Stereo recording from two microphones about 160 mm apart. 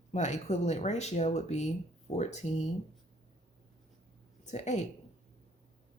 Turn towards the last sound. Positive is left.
turn(degrees=45)  # may be behind; listen again after turning